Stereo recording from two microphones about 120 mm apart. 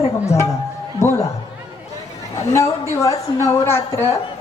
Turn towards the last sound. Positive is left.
turn(degrees=20)  # may be behind; listen again after turning